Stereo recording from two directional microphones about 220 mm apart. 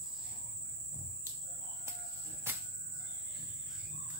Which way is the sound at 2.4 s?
10° right (ahead or behind).